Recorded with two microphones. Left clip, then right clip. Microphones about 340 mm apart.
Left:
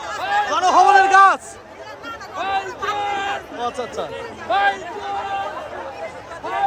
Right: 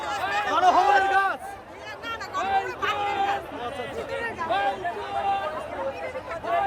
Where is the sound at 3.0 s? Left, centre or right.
Left.